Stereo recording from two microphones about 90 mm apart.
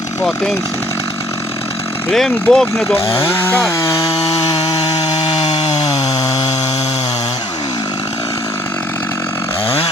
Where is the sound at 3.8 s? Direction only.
40° left (ahead or behind).